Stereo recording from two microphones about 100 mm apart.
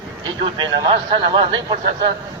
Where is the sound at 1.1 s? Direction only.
55° right (ahead or behind).